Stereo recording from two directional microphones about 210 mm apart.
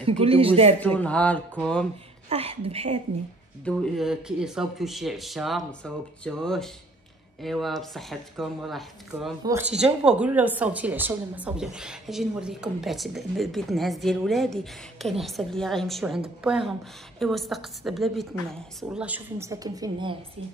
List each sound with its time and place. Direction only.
0.0 s a woman's voice: 25° right (ahead or behind)
0.7 s speech: 5° left (ahead or behind)
2.2 s a woman's voice: 30° right (ahead or behind)
3.6 s a woman's voice: centre (ahead or behind); by 20.2 s 20° right (ahead or behind)